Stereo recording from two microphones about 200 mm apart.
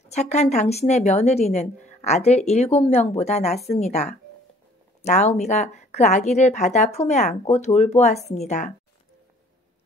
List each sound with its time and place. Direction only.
0.1 s speech: 35° left (ahead or behind)